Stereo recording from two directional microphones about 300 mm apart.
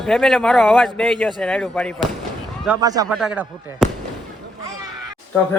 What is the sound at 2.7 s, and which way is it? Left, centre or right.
Speech, centre.